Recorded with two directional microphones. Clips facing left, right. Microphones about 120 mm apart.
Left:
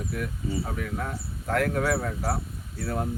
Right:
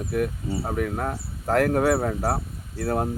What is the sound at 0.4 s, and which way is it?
Speech, 40° right (ahead or behind).